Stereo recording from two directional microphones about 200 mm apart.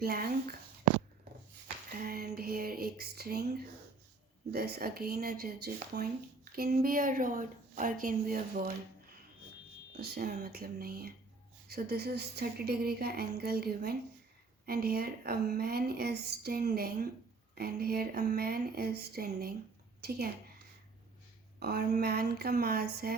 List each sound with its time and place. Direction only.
0.0 s speech: 50° right (ahead or behind)
1.9 s a sound: 50° right (ahead or behind)
4.5 s speech: 50° right (ahead or behind)
10.0 s speech: 50° right (ahead or behind)
21.6 s speech: 55° right (ahead or behind)